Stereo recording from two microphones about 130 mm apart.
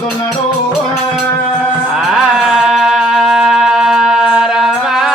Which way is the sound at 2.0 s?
Centre (ahead or behind).